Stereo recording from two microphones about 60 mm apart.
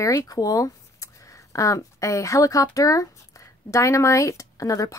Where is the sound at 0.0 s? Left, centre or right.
Left.